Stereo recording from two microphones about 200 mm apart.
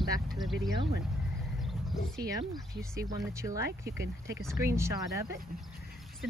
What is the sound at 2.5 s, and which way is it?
Speech, 15° right (ahead or behind).